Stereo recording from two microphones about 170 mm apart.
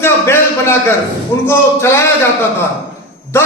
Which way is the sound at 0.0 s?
15° left (ahead or behind).